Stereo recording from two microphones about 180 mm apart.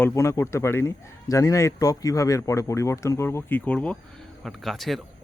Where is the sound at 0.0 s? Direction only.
15° left (ahead or behind).